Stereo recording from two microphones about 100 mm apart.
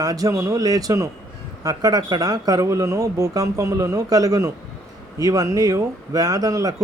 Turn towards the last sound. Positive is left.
turn(degrees=-35)  # may be behind; listen again after turning